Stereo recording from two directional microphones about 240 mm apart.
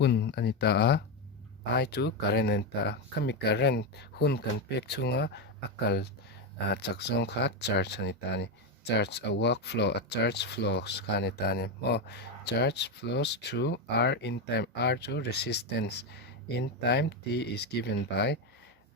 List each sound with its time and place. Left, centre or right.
0.0 s speech: left